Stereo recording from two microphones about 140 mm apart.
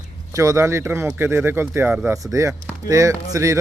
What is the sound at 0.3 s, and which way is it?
Speech, 20° right (ahead or behind).